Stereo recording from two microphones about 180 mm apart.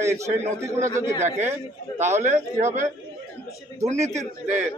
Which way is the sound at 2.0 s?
40° right (ahead or behind).